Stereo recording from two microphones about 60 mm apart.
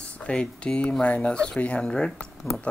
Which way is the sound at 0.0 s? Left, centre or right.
Centre.